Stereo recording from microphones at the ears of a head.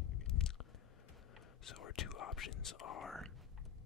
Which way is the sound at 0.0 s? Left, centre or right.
Left.